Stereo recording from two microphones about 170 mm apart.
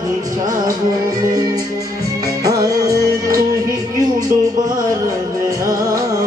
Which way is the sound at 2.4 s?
20° right (ahead or behind).